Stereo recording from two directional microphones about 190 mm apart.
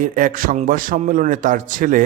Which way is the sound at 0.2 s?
45° right (ahead or behind).